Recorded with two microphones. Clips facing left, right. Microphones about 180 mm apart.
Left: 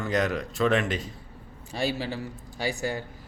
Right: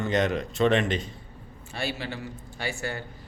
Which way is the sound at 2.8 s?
10° left (ahead or behind).